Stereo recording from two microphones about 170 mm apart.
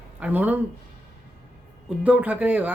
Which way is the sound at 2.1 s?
10° right (ahead or behind).